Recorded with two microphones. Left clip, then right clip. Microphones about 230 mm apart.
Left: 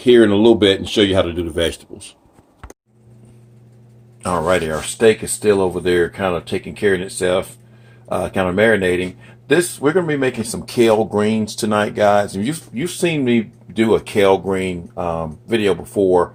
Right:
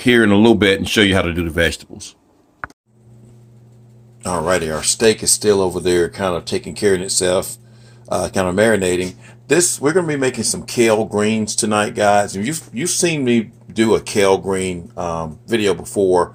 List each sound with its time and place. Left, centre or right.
0.0 s speech: right
4.2 s speech: centre